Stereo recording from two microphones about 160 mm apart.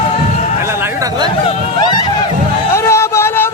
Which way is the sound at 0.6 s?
15° right (ahead or behind).